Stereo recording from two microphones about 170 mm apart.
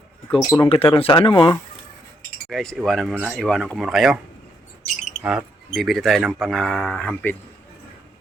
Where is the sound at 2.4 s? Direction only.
Centre (ahead or behind).